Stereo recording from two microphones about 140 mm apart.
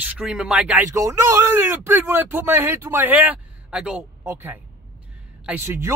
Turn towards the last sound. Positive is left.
turn(degrees=-20)  # may be behind; listen again after turning